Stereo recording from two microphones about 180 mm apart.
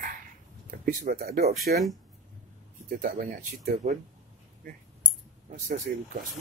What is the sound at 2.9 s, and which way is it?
Speech, 50° right (ahead or behind).